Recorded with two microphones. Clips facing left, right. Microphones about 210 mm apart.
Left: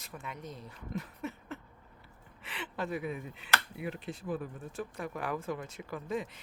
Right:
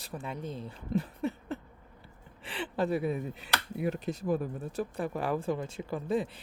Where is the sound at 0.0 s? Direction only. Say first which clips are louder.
Right 6 dB; 35° right (ahead or behind).